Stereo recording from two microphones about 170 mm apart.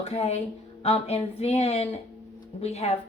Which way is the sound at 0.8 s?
35° left (ahead or behind).